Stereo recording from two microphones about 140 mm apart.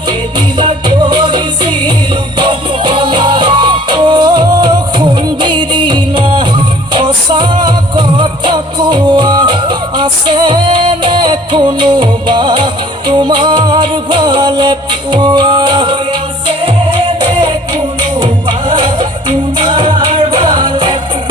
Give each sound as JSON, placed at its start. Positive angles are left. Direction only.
{"t": 0.6, "sound": "music", "side_deg": -35}